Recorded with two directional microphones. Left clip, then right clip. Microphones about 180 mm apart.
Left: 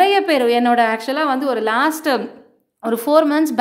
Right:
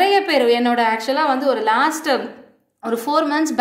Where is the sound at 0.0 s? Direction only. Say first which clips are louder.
Left 1 dB; 45° left (ahead or behind).